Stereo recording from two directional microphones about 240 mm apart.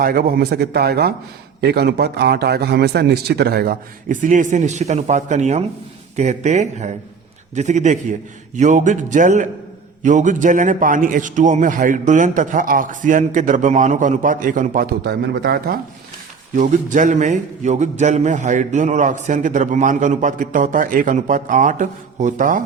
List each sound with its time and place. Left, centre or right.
0.0 s a man's voice: right